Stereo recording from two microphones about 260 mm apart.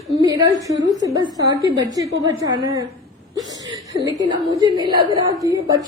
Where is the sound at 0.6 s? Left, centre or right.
Centre.